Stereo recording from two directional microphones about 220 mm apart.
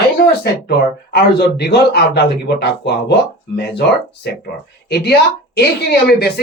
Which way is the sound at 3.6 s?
50° left (ahead or behind).